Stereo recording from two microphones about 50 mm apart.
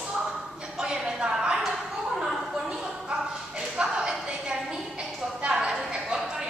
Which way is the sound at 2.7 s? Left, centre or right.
Centre.